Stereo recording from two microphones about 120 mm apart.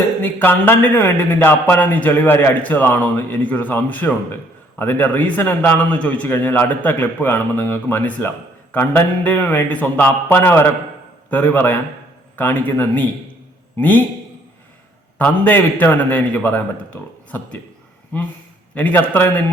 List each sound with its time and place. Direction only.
0.2 s a man's voice: 15° left (ahead or behind)
15.2 s a man's voice: 15° left (ahead or behind)
18.7 s a man's voice: 15° left (ahead or behind)